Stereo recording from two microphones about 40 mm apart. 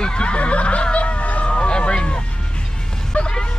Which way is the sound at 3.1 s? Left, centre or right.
Left.